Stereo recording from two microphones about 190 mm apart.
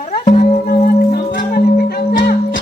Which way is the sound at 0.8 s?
50° left (ahead or behind).